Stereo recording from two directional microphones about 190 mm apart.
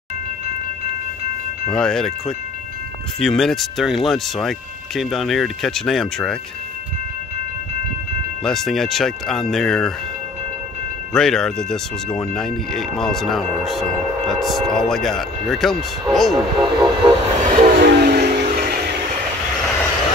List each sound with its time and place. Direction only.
1.7 s speech: 5° left (ahead or behind)
8.5 s speech: centre (ahead or behind)
11.1 s speech: 5° left (ahead or behind)
16.6 s vehicle: 30° right (ahead or behind)
17.5 s train: 50° right (ahead or behind)